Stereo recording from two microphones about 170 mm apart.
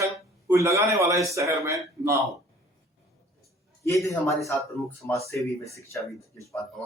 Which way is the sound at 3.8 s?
20° left (ahead or behind).